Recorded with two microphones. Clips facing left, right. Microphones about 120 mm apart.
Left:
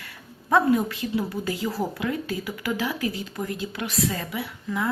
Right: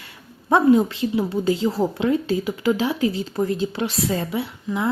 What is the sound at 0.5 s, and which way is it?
A woman's voice, 25° right (ahead or behind).